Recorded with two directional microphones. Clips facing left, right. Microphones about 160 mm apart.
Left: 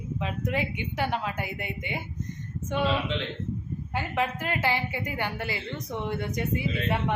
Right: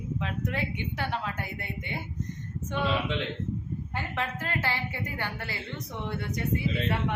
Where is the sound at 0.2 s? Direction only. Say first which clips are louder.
Left 4 dB; 15° left (ahead or behind).